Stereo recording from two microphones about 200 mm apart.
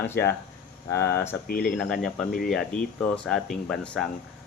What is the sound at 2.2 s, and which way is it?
Speech, 45° left (ahead or behind).